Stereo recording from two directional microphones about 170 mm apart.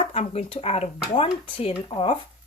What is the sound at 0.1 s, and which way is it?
Speech, 40° left (ahead or behind).